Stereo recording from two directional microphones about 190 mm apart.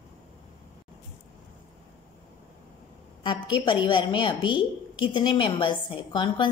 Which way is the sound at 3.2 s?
25° left (ahead or behind).